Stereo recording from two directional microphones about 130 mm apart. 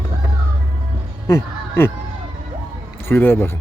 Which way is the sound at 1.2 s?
20° left (ahead or behind).